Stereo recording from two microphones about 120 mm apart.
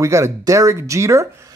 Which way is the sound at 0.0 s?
25° right (ahead or behind).